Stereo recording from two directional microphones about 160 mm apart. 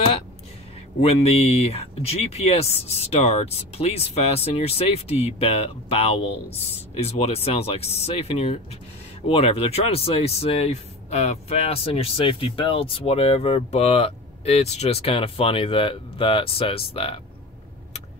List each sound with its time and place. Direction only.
1.0 s speech: 40° left (ahead or behind)